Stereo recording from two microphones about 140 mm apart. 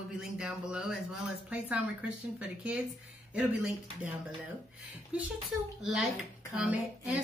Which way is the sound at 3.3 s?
10° right (ahead or behind).